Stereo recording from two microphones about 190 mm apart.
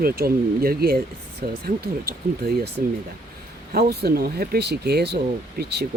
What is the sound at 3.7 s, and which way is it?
Speech, 55° right (ahead or behind).